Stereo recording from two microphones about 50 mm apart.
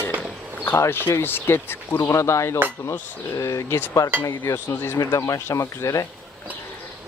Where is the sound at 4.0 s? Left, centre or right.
Left.